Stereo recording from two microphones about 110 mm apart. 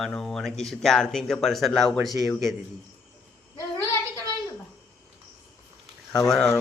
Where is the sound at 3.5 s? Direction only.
25° left (ahead or behind).